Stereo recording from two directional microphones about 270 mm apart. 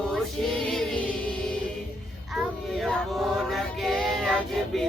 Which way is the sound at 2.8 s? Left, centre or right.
Centre.